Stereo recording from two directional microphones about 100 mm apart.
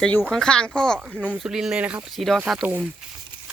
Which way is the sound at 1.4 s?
5° right (ahead or behind).